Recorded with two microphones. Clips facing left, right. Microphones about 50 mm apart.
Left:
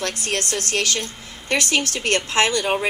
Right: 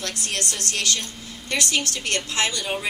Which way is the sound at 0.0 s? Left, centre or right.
Left.